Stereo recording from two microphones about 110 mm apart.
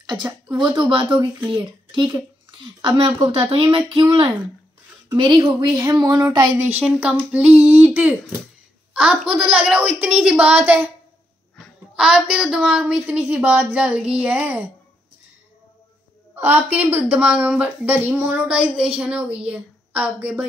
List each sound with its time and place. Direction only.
0.1 s a woman's voice: 40° right (ahead or behind)
5.9 s a sound: 35° right (ahead or behind)
6.5 s a woman's voice: 20° right (ahead or behind)
11.9 s speech: 5° right (ahead or behind)
16.3 s speech: 15° right (ahead or behind)
18.5 s a woman's voice: 5° right (ahead or behind)